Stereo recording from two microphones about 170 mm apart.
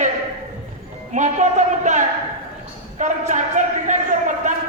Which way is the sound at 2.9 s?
45° right (ahead or behind).